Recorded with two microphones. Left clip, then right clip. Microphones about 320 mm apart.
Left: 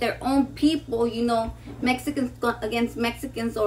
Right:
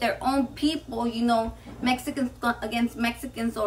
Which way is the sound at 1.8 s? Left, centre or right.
Centre.